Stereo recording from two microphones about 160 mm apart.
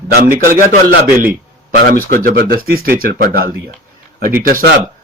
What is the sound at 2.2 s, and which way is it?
A man's voice, 65° right (ahead or behind).